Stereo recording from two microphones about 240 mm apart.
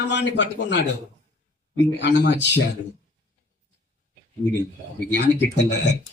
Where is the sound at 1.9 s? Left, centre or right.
Left.